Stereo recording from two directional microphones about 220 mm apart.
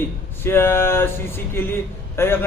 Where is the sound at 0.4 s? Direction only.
10° left (ahead or behind).